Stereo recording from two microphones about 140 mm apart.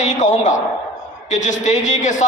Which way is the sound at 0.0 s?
60° left (ahead or behind).